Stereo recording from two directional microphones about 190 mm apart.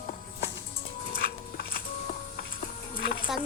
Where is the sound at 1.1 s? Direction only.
55° left (ahead or behind).